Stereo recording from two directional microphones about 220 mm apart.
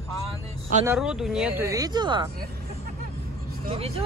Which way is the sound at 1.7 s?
20° right (ahead or behind).